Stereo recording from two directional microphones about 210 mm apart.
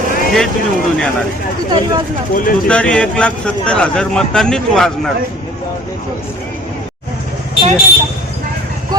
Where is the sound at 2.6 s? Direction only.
5° left (ahead or behind).